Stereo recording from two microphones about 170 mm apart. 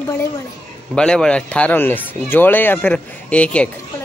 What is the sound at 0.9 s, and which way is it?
Speech, 5° left (ahead or behind).